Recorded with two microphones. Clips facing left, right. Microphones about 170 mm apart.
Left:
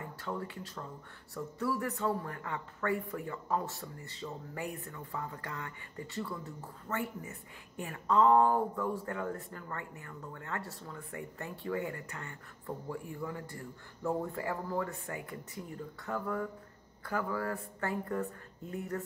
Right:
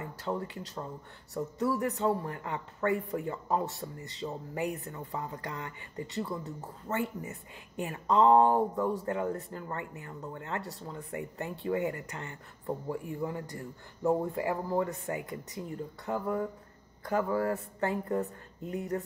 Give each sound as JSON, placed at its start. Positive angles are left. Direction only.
{"t": 0.0, "sound": "a man's voice", "side_deg": -20}